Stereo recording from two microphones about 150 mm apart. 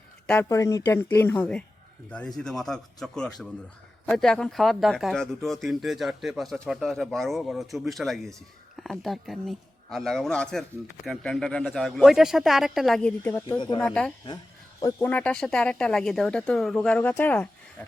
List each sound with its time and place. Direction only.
0.4 s speech: 20° left (ahead or behind)
13.6 s speech: 30° left (ahead or behind)
13.8 s speech: 5° left (ahead or behind)